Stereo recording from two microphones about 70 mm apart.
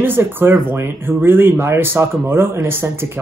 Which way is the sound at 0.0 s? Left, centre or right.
Right.